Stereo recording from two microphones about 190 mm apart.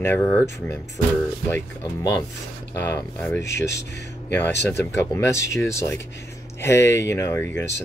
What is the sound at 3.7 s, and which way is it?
Speech, 65° left (ahead or behind).